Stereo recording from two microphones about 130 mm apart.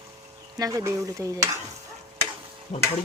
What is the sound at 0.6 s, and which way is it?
Speech, 25° right (ahead or behind).